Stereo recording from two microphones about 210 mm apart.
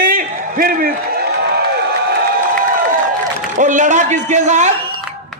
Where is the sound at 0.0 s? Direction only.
40° right (ahead or behind).